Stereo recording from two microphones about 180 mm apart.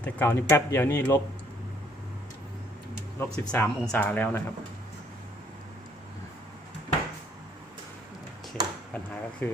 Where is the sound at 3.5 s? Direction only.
10° left (ahead or behind).